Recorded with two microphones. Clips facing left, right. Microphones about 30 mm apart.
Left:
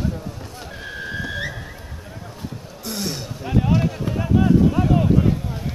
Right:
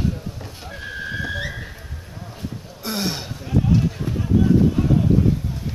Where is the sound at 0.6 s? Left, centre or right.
Centre.